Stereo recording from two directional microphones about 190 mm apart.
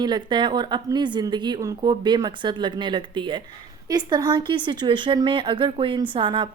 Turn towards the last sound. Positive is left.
turn(degrees=-25)  # may be behind; listen again after turning